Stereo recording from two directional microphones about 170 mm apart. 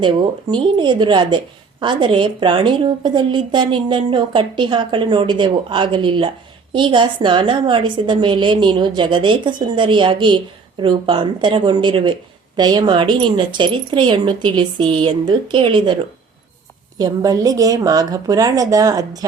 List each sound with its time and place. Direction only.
0.0 s a woman's voice: 30° right (ahead or behind)
17.0 s a woman's voice: 20° right (ahead or behind)